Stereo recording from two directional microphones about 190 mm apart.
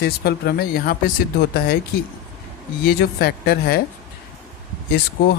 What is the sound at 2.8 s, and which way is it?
Speech, 55° left (ahead or behind).